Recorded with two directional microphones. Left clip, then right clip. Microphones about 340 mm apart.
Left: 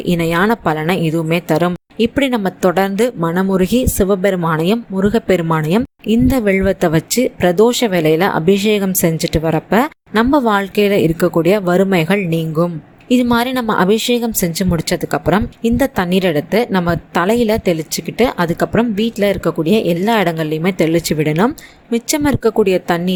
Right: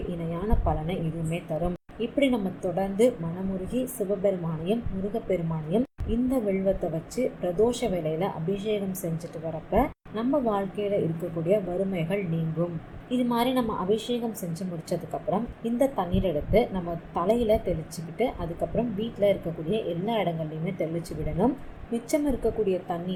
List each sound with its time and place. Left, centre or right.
0.2 s a woman's voice: left